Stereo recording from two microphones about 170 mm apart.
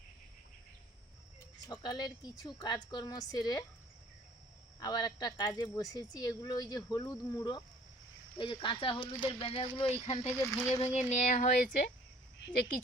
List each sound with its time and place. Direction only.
1.6 s a woman's voice: 25° left (ahead or behind)
4.8 s a woman's voice: 25° left (ahead or behind)
10.3 s speech: 15° left (ahead or behind)
10.8 s speech: 40° left (ahead or behind)
12.4 s speech: 65° left (ahead or behind)